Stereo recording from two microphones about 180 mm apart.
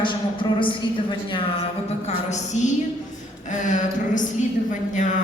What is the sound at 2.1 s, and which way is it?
A woman's voice, 40° left (ahead or behind).